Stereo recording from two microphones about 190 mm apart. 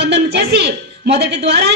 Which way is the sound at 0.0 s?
65° right (ahead or behind).